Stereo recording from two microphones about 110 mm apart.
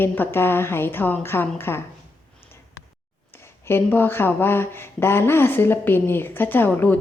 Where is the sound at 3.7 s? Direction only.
20° left (ahead or behind).